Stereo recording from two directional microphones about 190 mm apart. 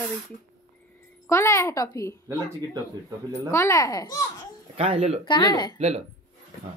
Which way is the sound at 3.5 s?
15° left (ahead or behind).